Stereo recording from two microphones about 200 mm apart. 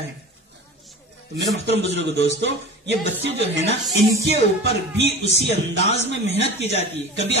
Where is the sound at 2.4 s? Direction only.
60° right (ahead or behind).